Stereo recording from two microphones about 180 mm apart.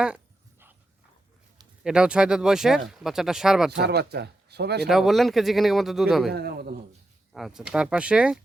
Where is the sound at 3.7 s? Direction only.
65° right (ahead or behind).